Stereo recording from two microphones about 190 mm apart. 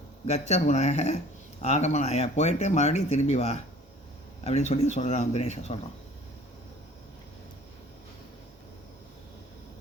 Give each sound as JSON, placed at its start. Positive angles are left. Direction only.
{"t": 0.3, "sound": "speech", "side_deg": 35}